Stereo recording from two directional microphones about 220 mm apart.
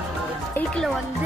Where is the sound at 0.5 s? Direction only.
5° left (ahead or behind).